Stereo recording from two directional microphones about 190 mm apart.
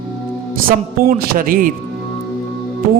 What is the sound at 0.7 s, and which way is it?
Music, 50° right (ahead or behind).